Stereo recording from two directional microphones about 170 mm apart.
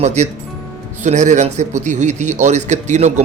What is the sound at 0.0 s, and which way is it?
Speech, 40° right (ahead or behind).